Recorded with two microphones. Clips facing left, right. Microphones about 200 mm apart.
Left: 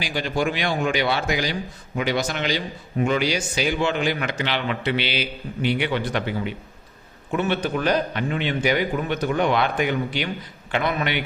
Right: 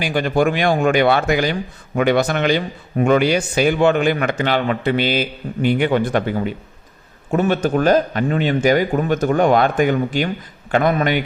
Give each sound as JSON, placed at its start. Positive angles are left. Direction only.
{"t": 0.0, "sound": "a man's voice", "side_deg": -55}